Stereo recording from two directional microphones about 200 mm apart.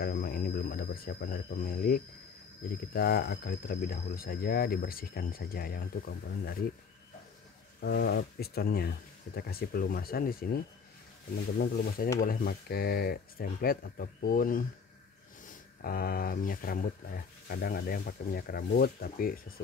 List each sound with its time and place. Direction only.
0.0 s a sound: 45° left (ahead or behind)
2.9 s speech: 50° left (ahead or behind)
7.8 s speech: 50° left (ahead or behind)